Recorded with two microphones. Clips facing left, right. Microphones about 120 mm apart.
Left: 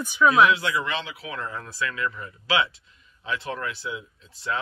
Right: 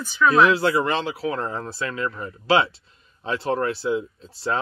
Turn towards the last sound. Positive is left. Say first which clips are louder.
# right 4 dB
turn(degrees=-35)  # may be behind; listen again after turning